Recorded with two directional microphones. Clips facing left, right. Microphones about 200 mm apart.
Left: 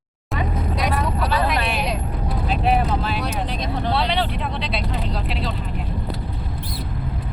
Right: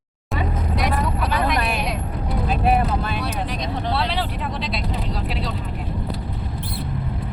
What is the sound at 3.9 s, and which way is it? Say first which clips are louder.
Vehicle: left 3 dB; centre (ahead or behind).